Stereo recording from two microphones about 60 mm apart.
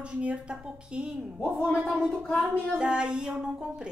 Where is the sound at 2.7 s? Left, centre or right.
Centre.